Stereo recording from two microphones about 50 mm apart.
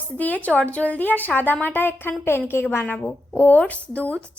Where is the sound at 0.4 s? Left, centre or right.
Left.